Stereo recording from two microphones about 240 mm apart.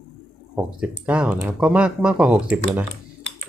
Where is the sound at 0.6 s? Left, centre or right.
Centre.